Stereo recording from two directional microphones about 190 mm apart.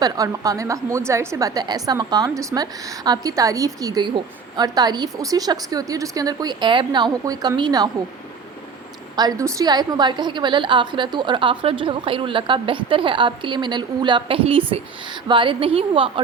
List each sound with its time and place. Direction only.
0.0 s a woman's voice: 20° right (ahead or behind)
9.1 s a woman's voice: 20° right (ahead or behind)